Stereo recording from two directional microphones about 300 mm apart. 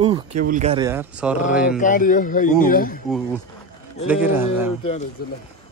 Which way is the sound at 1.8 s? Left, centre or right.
Left.